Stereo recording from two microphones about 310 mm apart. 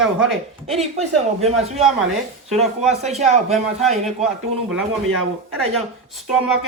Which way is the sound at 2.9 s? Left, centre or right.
Right.